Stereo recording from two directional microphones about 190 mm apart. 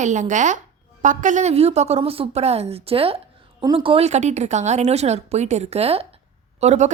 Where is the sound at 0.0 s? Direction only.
40° right (ahead or behind).